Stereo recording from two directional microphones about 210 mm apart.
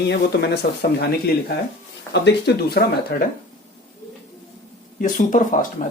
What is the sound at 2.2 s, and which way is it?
Speech, 50° left (ahead or behind).